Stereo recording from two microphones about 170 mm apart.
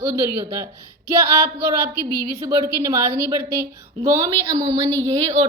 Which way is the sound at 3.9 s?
30° right (ahead or behind).